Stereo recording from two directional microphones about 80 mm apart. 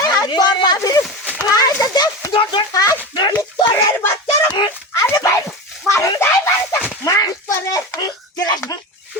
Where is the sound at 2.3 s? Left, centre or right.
Left.